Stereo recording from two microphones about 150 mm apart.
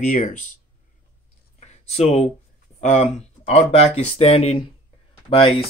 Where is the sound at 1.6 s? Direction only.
45° left (ahead or behind).